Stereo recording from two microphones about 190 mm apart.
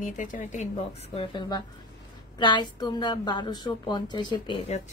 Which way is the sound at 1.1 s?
25° left (ahead or behind).